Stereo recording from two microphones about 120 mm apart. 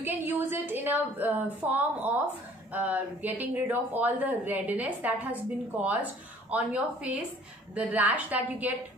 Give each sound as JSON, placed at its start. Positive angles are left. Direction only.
{"t": 0.0, "sound": "speech", "side_deg": -15}